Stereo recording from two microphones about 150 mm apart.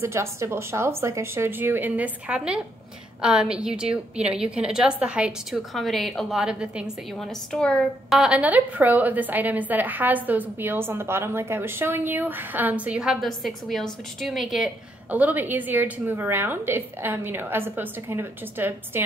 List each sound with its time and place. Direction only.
0.0 s a woman's voice: 15° right (ahead or behind)